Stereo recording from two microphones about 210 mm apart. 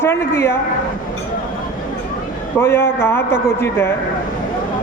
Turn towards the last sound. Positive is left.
turn(degrees=10)  # may be behind; listen again after turning